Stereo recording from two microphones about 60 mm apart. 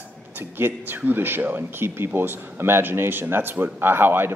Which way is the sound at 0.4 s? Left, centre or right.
Right.